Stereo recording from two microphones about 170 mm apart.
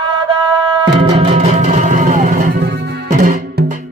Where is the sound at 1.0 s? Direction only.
35° right (ahead or behind); by 3.1 s 80° right.